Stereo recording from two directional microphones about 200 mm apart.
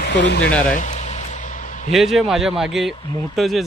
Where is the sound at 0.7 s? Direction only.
40° left (ahead or behind).